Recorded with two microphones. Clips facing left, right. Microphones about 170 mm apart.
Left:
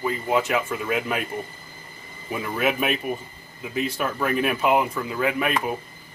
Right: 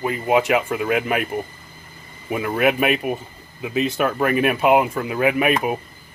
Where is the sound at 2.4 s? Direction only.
60° right (ahead or behind).